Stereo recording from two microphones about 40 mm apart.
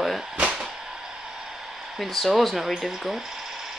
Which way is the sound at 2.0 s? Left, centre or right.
Centre.